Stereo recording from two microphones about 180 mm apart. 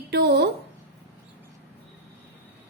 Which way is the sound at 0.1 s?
70° right (ahead or behind).